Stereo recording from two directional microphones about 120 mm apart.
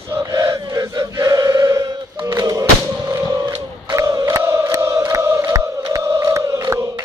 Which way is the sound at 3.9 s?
30° right (ahead or behind).